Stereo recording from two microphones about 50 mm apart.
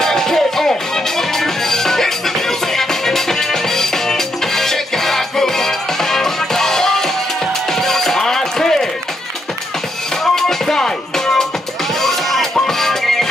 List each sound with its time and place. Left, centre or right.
0.0 s music: centre
10.2 s music: centre